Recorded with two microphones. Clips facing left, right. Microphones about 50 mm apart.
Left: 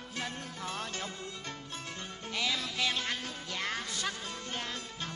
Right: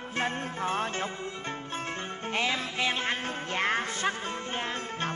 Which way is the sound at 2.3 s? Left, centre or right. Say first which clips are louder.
Right 4 dB; right.